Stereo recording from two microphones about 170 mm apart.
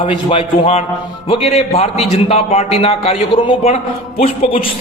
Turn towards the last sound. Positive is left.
turn(degrees=30)  # may be behind; listen again after turning